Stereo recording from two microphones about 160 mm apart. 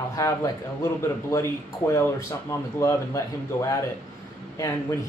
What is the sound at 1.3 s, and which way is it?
Speech, 20° left (ahead or behind).